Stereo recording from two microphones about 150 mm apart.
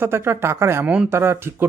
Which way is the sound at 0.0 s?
15° right (ahead or behind).